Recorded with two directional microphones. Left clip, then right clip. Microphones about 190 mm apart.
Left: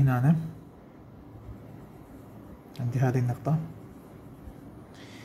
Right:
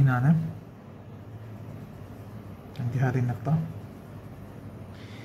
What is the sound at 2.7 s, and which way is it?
Speech, 40° left (ahead or behind).